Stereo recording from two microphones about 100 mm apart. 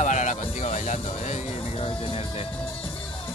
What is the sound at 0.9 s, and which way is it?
Speech, 90° left.